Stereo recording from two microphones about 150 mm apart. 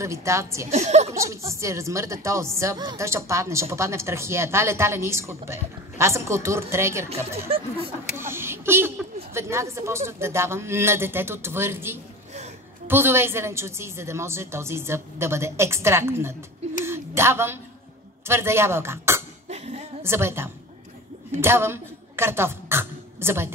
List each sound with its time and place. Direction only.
0.0 s speech: 20° right (ahead or behind)
0.7 s a woman's voice: 50° right (ahead or behind)
1.1 s speech: 20° right (ahead or behind)
7.1 s speech: 45° right (ahead or behind)
8.2 s a woman's voice: 15° right (ahead or behind)
16.8 s a sound: 15° right (ahead or behind)
18.2 s speech: 15° right (ahead or behind)
19.5 s a sound: 45° right (ahead or behind)
20.0 s a woman's voice: 15° right (ahead or behind)